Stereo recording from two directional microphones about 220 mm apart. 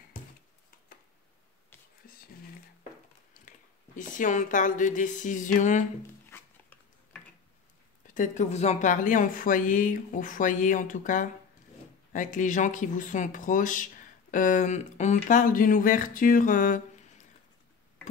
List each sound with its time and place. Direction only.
3.4 s speech: 35° left (ahead or behind)
6.3 s a sound: 5° left (ahead or behind)
8.1 s a woman's voice: 35° left (ahead or behind)